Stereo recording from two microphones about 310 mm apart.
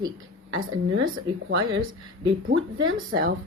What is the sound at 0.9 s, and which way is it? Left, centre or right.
A woman's voice, right.